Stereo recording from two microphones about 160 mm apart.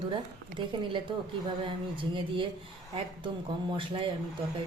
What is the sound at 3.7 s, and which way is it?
Speech, 30° right (ahead or behind).